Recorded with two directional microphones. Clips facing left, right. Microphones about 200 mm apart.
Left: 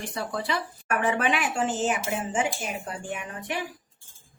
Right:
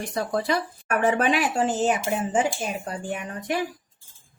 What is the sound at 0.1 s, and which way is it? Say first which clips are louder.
Speech: right 6 dB; 40° right (ahead or behind).